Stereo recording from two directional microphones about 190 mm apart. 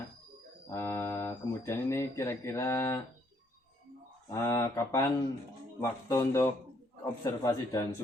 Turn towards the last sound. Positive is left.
turn(degrees=15)  # may be behind; listen again after turning